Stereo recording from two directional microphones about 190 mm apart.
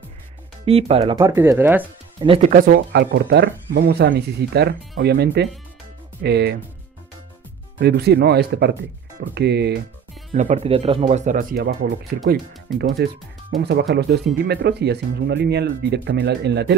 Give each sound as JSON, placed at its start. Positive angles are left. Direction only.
{"t": 0.7, "sound": "speech", "side_deg": -30}
{"t": 1.1, "sound": "speech", "side_deg": -15}
{"t": 2.1, "sound": "speech", "side_deg": -30}
{"t": 2.5, "sound": "speech", "side_deg": -50}
{"t": 7.8, "sound": "speech", "side_deg": -60}
{"t": 10.3, "sound": "speech", "side_deg": -40}
{"t": 11.5, "sound": "speech", "side_deg": -55}